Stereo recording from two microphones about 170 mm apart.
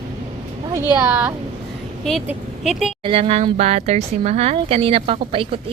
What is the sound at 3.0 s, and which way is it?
Speech, 35° right (ahead or behind).